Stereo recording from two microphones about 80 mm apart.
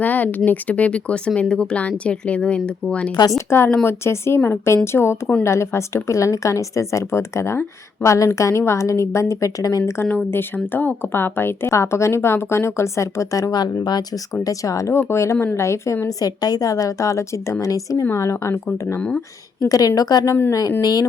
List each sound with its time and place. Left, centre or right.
0.0 s speech: left
3.2 s a woman's voice: left
10.0 s a woman's voice: left
13.8 s speech: left
14.4 s a woman's voice: left
14.9 s a woman's voice: left
19.5 s a woman's voice: left
20.2 s a woman's voice: left